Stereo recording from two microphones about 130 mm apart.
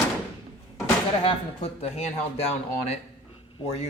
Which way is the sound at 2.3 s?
55° left (ahead or behind).